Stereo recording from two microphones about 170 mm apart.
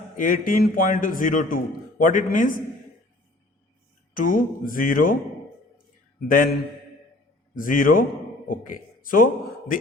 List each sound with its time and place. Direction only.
0.2 s a man's voice: 55° left (ahead or behind)
4.1 s a man's voice: 50° left (ahead or behind)
6.2 s a man's voice: 55° left (ahead or behind)